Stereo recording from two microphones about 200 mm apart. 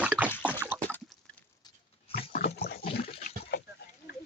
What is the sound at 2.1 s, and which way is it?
Dog, 50° left (ahead or behind).